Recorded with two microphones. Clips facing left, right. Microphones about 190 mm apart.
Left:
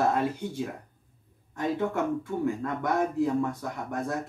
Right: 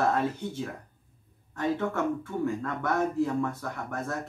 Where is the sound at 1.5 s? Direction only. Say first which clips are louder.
Left 1 dB; 15° left (ahead or behind).